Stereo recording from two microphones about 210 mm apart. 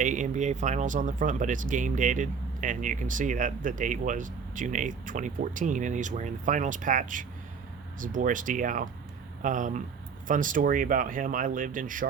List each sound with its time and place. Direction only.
0.0 s speech: 35° right (ahead or behind)